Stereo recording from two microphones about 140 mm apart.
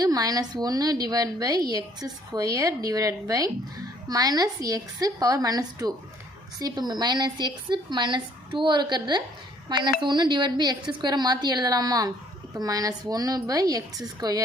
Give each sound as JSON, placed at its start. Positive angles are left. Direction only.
{"t": 0.0, "sound": "a woman's voice", "side_deg": -25}